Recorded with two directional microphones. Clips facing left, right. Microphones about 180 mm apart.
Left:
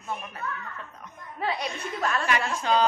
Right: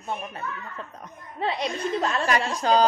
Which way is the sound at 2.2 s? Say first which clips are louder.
Right 3 dB; 40° right (ahead or behind).